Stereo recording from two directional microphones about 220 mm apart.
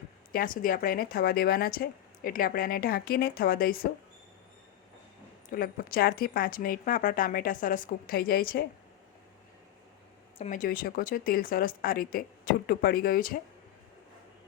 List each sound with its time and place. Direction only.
0.3 s speech: 40° left (ahead or behind)
5.5 s speech: 40° left (ahead or behind)
10.3 s speech: 30° left (ahead or behind)